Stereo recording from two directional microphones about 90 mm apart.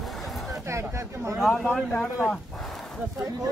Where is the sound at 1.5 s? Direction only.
15° left (ahead or behind).